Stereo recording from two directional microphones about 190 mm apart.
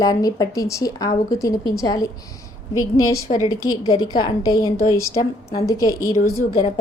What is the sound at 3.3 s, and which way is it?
Speech, 40° left (ahead or behind).